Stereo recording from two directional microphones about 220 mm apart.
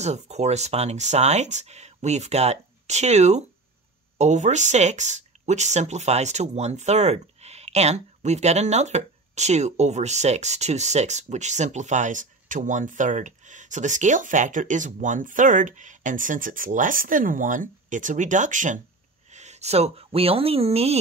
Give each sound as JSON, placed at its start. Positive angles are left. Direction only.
{"t": 0.0, "sound": "speech", "side_deg": -30}